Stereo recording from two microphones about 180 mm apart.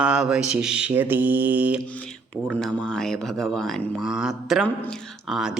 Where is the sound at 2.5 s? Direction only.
5° left (ahead or behind).